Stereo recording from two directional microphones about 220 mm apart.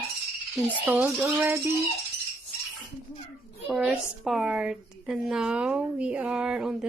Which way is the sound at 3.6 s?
5° right (ahead or behind).